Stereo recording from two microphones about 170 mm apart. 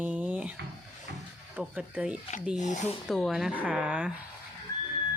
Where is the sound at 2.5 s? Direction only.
45° left (ahead or behind).